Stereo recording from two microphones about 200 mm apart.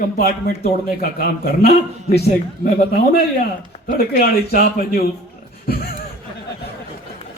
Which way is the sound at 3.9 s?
50° left (ahead or behind).